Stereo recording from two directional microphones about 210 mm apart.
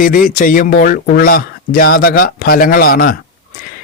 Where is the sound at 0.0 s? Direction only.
40° left (ahead or behind).